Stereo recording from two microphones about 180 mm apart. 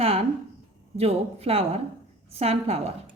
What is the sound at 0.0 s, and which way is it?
A woman's voice, 35° right (ahead or behind).